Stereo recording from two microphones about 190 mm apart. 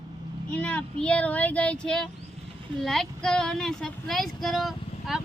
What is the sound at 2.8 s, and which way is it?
Child singing, centre (ahead or behind).